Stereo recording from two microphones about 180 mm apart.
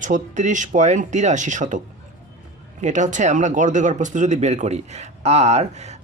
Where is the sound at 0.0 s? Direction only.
45° right (ahead or behind).